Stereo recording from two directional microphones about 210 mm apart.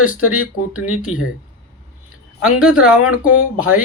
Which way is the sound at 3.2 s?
90° left.